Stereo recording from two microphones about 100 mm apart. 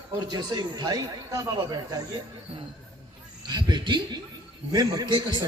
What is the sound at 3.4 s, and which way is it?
A man's voice, 45° right (ahead or behind).